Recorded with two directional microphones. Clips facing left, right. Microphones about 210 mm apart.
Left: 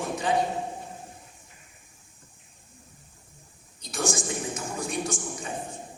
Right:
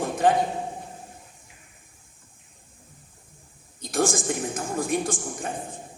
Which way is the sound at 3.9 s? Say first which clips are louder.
Right 5 dB; 55° right (ahead or behind).